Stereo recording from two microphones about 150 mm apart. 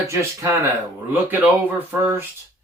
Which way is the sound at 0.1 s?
20° right (ahead or behind).